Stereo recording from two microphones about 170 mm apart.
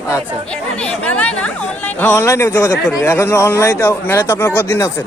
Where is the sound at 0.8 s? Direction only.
10° left (ahead or behind).